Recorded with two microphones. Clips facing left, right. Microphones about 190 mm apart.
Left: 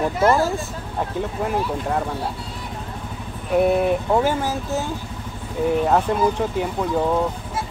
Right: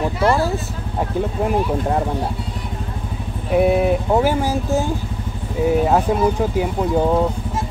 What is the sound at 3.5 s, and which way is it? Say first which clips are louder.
Speech: right 2 dB; 5° right (ahead or behind).